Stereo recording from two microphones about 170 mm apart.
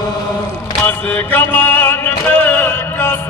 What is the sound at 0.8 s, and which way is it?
Music, 10° left (ahead or behind).